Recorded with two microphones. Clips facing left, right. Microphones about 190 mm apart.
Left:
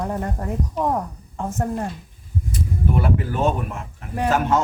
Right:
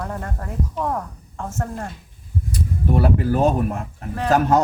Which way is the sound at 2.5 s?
35° right (ahead or behind).